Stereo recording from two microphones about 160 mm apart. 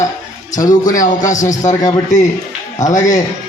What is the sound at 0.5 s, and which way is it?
Speech, 55° left (ahead or behind).